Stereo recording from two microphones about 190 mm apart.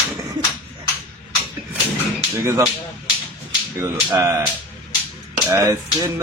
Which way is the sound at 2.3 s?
15° right (ahead or behind).